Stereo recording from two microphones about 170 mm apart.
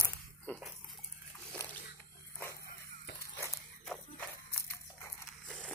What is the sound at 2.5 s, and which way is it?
Dog, 65° left (ahead or behind).